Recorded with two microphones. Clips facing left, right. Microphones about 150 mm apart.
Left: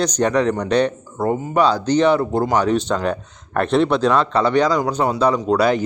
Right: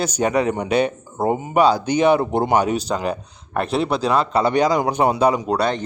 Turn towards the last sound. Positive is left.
turn(degrees=5)  # may be behind; listen again after turning